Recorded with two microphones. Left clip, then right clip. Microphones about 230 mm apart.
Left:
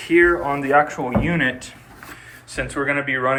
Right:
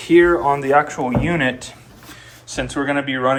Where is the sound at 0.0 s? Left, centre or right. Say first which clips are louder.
Right 3 dB; centre.